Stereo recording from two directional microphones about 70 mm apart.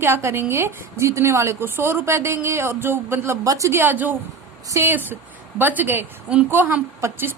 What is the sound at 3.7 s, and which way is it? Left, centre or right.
A woman's voice, right.